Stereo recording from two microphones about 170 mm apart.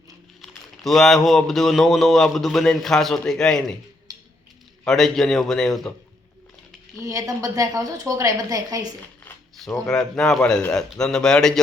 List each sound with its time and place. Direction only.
0.4 s speech: centre (ahead or behind)
4.1 s a sound: 20° right (ahead or behind)
4.9 s speech: centre (ahead or behind)
7.0 s a woman's voice: 20° right (ahead or behind)
9.6 s speech: 5° left (ahead or behind)